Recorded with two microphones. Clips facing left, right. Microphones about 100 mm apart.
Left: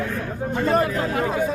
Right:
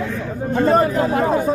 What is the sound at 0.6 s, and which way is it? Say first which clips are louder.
Speech: right 5 dB; 35° right (ahead or behind).